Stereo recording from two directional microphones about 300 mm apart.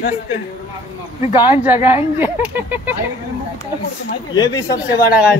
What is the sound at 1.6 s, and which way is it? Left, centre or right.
Speech, centre.